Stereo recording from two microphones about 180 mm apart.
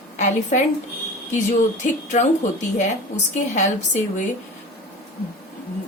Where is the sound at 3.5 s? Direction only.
40° left (ahead or behind).